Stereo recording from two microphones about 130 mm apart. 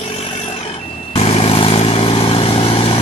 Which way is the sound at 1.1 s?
50° left (ahead or behind).